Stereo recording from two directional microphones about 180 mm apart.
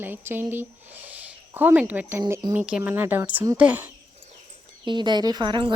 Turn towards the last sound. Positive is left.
turn(degrees=-25)  # may be behind; listen again after turning